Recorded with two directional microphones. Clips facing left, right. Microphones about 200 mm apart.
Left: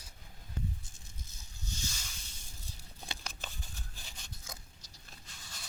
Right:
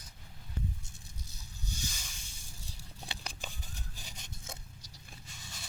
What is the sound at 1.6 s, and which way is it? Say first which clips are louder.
Boat: right 1 dB; 15° right (ahead or behind).